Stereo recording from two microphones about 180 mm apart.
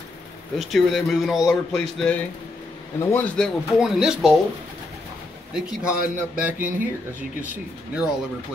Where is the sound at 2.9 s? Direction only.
15° left (ahead or behind).